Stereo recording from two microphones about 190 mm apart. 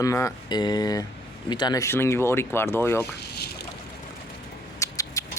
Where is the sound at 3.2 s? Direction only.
55° left (ahead or behind).